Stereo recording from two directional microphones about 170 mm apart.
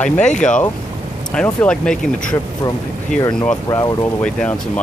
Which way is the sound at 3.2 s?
25° left (ahead or behind).